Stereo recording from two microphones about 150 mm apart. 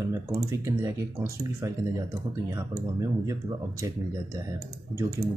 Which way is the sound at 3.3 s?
20° right (ahead or behind).